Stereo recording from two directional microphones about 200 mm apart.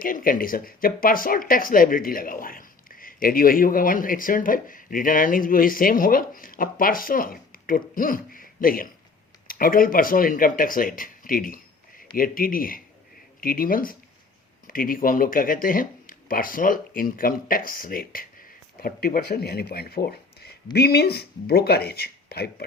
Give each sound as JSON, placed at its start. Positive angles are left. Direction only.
{"t": 0.0, "sound": "speech", "side_deg": 45}